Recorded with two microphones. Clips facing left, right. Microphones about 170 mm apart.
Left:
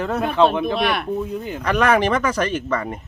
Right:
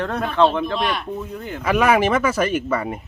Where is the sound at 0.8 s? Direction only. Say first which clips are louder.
Left 2 dB; 60° left (ahead or behind).